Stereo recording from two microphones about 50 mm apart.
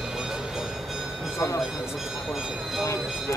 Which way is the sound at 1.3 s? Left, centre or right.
Left.